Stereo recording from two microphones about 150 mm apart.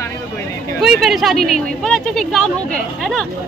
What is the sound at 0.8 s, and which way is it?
Speech, centre (ahead or behind).